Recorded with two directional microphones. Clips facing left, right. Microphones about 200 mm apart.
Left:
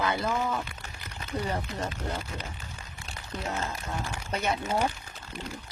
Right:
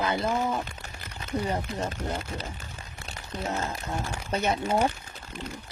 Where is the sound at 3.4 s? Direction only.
30° right (ahead or behind).